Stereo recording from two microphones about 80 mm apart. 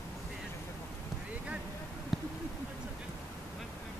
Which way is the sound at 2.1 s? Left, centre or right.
Centre.